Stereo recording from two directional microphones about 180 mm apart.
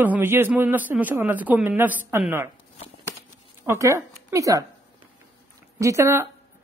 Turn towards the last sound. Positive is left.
turn(degrees=-15)  # may be behind; listen again after turning